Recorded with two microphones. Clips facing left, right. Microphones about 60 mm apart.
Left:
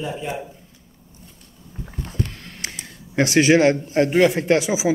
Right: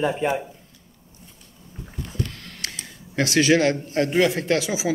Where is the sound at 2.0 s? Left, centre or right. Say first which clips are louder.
Left 3 dB; left.